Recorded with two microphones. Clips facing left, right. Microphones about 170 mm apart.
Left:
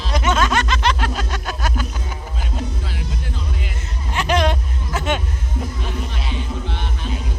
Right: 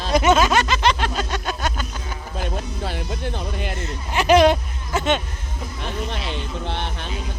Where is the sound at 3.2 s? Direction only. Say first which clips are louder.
Right 4 dB; 70° right (ahead or behind).